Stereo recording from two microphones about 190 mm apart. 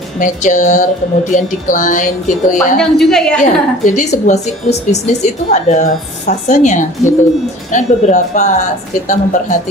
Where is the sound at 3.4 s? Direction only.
40° left (ahead or behind).